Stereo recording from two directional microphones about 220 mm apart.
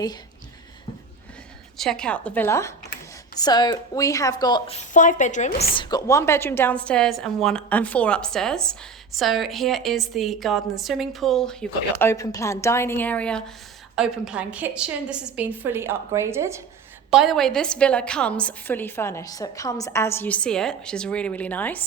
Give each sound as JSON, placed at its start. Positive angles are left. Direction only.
{"t": 1.8, "sound": "a woman's voice", "side_deg": 5}
{"t": 5.7, "sound": "a woman's voice", "side_deg": 20}
{"t": 17.1, "sound": "a woman's voice", "side_deg": 0}